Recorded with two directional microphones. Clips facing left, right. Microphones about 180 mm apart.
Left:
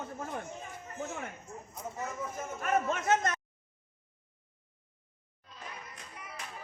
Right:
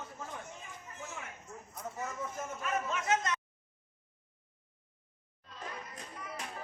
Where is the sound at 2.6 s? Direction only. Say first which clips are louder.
Left 5 dB; 50° left (ahead or behind).